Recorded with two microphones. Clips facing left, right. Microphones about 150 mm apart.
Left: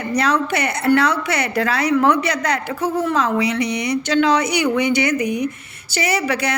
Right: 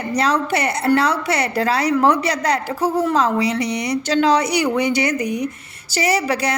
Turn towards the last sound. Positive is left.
turn(degrees=-35)  # may be behind; listen again after turning